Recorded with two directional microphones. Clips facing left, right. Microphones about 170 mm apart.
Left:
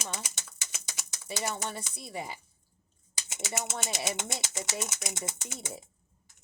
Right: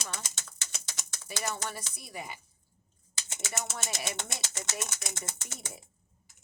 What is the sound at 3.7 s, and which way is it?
A woman's voice, 20° left (ahead or behind).